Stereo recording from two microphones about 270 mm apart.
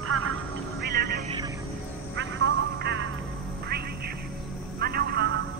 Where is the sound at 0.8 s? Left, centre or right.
Right.